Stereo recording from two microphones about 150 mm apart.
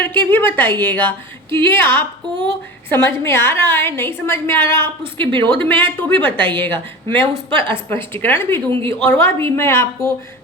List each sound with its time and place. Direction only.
0.0 s a woman's voice: 10° left (ahead or behind)
5.1 s speech: 35° right (ahead or behind)
5.5 s a woman's voice: 15° left (ahead or behind)